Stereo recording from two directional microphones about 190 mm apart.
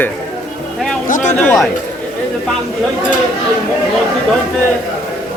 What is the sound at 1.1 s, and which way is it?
Speech, 40° left (ahead or behind).